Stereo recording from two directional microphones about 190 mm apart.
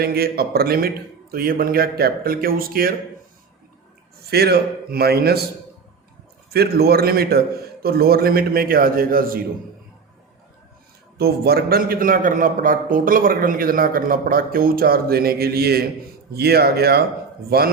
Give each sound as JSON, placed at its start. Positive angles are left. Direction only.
{"t": 0.0, "sound": "a man's voice", "side_deg": -55}
{"t": 4.3, "sound": "a man's voice", "side_deg": -55}
{"t": 6.5, "sound": "a man's voice", "side_deg": -55}
{"t": 11.2, "sound": "a man's voice", "side_deg": -55}